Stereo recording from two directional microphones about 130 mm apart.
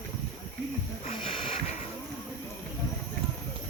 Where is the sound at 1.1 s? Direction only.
45° left (ahead or behind).